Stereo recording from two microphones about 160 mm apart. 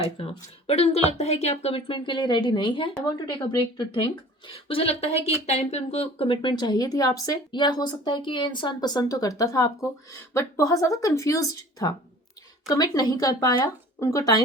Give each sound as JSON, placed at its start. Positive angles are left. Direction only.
{"t": 0.2, "sound": "speech", "side_deg": 35}